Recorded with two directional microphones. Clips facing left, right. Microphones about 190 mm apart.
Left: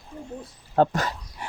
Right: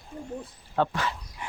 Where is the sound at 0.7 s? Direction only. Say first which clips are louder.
Left 5 dB; 40° left (ahead or behind).